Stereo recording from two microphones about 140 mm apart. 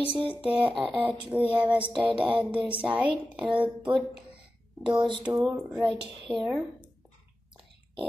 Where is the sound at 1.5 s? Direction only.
10° right (ahead or behind).